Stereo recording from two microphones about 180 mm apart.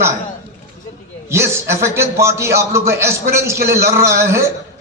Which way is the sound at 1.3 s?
15° right (ahead or behind).